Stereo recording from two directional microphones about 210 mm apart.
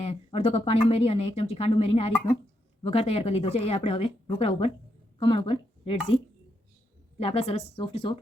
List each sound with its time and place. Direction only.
0.0 s speech: 30° left (ahead or behind)
7.2 s speech: 25° left (ahead or behind)